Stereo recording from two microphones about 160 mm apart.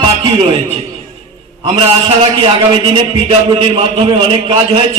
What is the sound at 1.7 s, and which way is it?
A man's voice, 35° right (ahead or behind).